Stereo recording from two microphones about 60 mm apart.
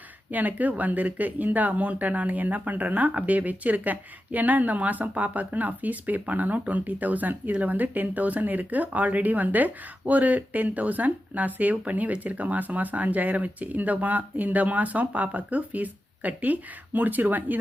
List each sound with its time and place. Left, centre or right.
0.3 s speech: right